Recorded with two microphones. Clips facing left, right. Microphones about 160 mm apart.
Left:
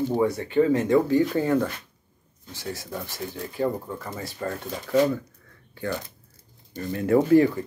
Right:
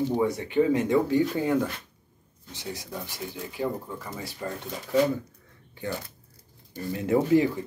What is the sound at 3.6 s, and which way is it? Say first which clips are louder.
Speech: left 4 dB; 55° left (ahead or behind).